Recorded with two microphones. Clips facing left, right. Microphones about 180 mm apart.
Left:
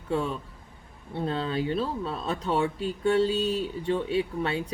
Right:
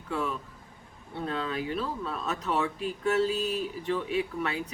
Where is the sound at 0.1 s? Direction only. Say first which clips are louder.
Left 4 dB; 30° left (ahead or behind).